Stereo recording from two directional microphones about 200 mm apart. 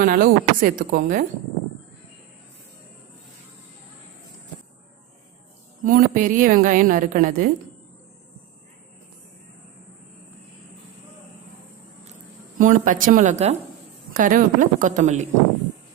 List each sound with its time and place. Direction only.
0.0 s a woman's voice: 45° right (ahead or behind)
5.8 s a woman's voice: 40° right (ahead or behind)
12.5 s a woman's voice: 40° right (ahead or behind)